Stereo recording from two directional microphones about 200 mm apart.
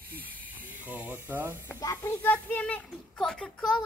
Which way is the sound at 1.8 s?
20° left (ahead or behind).